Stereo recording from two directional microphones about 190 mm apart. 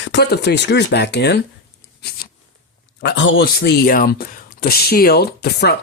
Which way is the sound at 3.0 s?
70° left (ahead or behind).